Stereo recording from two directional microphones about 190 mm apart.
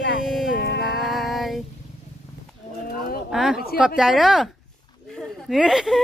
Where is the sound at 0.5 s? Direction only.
60° left (ahead or behind).